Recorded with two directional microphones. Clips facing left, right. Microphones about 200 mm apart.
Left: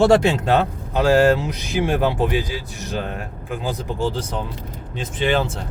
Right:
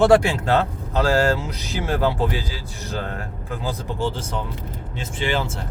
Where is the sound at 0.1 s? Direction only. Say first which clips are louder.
Left 1 dB; 20° left (ahead or behind).